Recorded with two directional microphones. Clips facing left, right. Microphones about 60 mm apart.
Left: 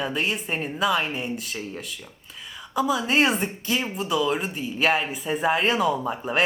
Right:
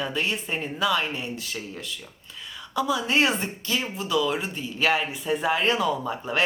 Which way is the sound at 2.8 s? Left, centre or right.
Centre.